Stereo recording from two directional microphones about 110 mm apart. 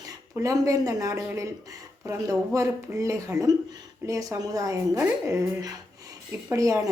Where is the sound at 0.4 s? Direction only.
30° right (ahead or behind).